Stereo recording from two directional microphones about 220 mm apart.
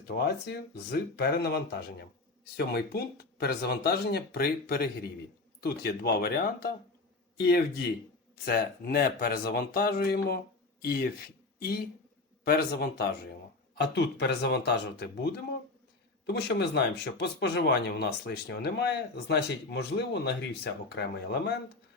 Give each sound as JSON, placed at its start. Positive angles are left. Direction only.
{"t": 0.3, "sound": "speech", "side_deg": 50}
{"t": 12.5, "sound": "speech", "side_deg": 45}